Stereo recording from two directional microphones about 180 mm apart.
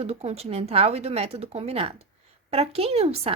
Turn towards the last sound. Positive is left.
turn(degrees=-35)  # may be behind; listen again after turning